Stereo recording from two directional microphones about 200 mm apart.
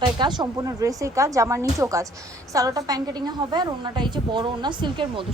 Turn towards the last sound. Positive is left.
turn(degrees=-25)  # may be behind; listen again after turning